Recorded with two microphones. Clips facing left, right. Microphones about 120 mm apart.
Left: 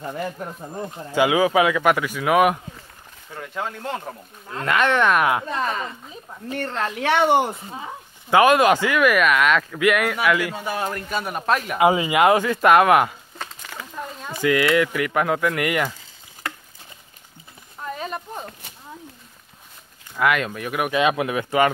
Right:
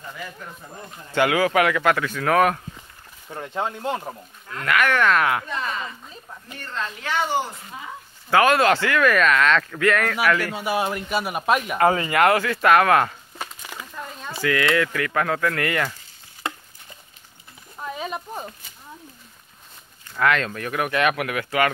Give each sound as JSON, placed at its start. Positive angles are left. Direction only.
{"t": 0.0, "sound": "speech", "side_deg": 50}
{"t": 0.4, "sound": "speech", "side_deg": 35}
{"t": 1.1, "sound": "speech", "side_deg": 15}
{"t": 3.3, "sound": "speech", "side_deg": -25}
{"t": 4.5, "sound": "speech", "side_deg": 25}
{"t": 5.4, "sound": "speech", "side_deg": 40}
{"t": 6.5, "sound": "speech", "side_deg": 70}
{"t": 8.3, "sound": "speech", "side_deg": 15}
{"t": 10.5, "sound": "a man's voice", "side_deg": -10}
{"t": 11.8, "sound": "speech", "side_deg": 10}
{"t": 13.9, "sound": "a sound", "side_deg": 10}
{"t": 14.4, "sound": "speech", "side_deg": 20}
{"t": 17.7, "sound": "a sound", "side_deg": -5}
{"t": 20.2, "sound": "speech", "side_deg": 10}